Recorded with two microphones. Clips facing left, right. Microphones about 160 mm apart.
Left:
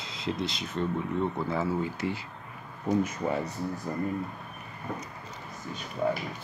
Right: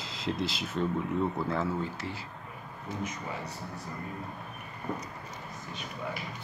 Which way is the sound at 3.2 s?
45° left (ahead or behind).